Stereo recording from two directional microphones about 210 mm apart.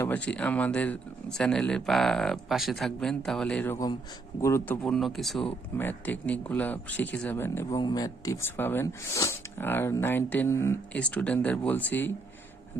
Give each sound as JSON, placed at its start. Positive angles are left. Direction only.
{"t": 0.0, "sound": "speech", "side_deg": 5}